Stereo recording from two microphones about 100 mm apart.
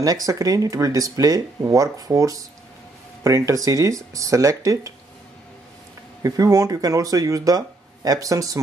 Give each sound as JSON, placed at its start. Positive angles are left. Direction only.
{"t": 0.0, "sound": "speech", "side_deg": -35}
{"t": 6.2, "sound": "speech", "side_deg": -35}